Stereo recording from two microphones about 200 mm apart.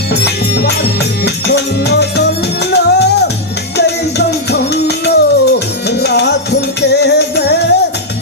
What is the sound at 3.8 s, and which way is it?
Music, 55° left (ahead or behind).